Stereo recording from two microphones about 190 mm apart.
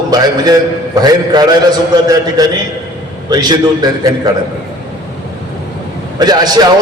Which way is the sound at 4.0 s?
20° right (ahead or behind).